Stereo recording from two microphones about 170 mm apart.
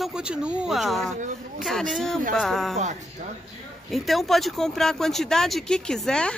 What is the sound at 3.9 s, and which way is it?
Speech, centre (ahead or behind).